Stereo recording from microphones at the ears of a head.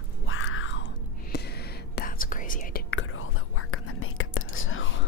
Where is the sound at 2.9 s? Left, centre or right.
Left.